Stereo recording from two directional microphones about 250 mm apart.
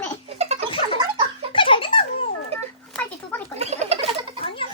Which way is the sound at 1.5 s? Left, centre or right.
Centre.